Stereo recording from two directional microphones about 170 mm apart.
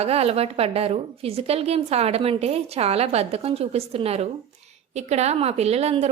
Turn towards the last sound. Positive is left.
turn(degrees=-35)  # may be behind; listen again after turning